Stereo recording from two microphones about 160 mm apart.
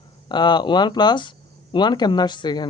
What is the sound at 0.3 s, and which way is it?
Speech, 30° left (ahead or behind).